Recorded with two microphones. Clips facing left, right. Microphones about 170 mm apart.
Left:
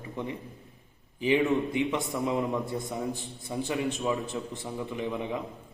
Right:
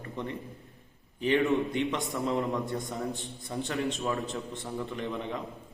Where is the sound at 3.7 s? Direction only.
15° left (ahead or behind).